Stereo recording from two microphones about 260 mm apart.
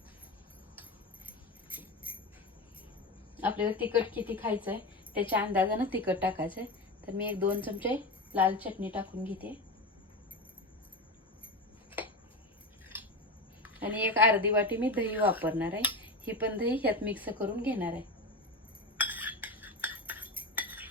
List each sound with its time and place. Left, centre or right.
3.3 s a woman's voice: centre
13.6 s a woman's voice: centre
18.9 s cutlery: centre
20.1 s cutlery: centre
20.6 s cutlery: centre